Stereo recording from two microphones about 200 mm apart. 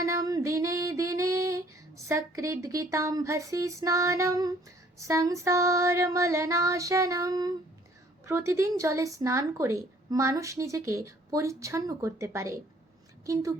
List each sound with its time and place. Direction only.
0.0 s music: 15° right (ahead or behind)
2.0 s speech: 15° right (ahead or behind)